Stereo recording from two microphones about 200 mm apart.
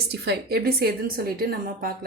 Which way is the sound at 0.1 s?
50° right (ahead or behind).